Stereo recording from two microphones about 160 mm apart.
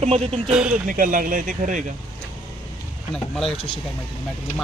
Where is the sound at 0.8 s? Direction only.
55° right (ahead or behind).